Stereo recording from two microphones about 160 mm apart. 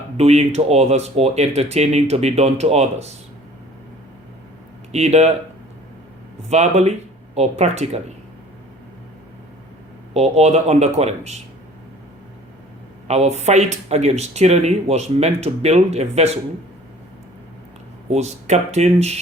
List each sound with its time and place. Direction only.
0.2 s speech: 40° right (ahead or behind)
4.9 s speech: 45° right (ahead or behind)
6.5 s speech: 45° right (ahead or behind)
10.2 s speech: 40° right (ahead or behind)
13.1 s speech: 40° right (ahead or behind)
18.1 s speech: 45° right (ahead or behind)